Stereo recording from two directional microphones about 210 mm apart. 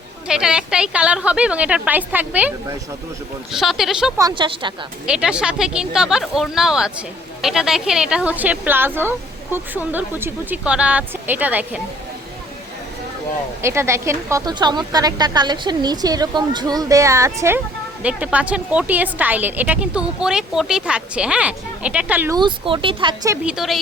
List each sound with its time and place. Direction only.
0.3 s a woman's voice: 5° right (ahead or behind)
4.2 s speech: 20° right (ahead or behind)
5.0 s a woman's voice: 5° right (ahead or behind)
13.6 s a woman's voice: 10° right (ahead or behind)
22.4 s speech: 25° right (ahead or behind)
23.6 s a woman's voice: centre (ahead or behind)